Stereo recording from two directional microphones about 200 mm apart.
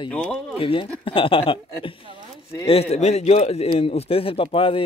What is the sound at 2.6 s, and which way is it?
A man's voice, 30° left (ahead or behind).